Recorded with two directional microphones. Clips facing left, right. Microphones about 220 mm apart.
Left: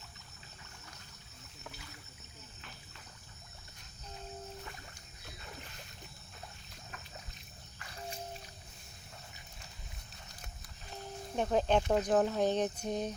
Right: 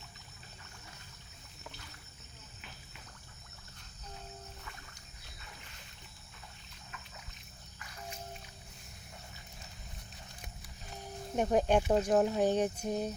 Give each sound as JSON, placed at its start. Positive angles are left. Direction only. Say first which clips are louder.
{"t": 6.9, "sound": "trickle", "louder": "even", "side_deg": 40}
{"t": 11.3, "sound": "speech", "louder": "right 2 dB", "side_deg": -15}